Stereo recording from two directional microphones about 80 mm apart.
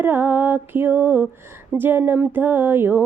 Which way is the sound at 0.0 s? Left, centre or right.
Right.